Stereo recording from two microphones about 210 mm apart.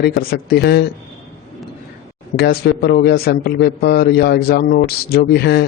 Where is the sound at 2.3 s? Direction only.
50° left (ahead or behind).